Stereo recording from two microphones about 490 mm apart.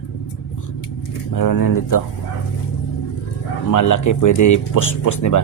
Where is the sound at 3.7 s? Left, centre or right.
Left.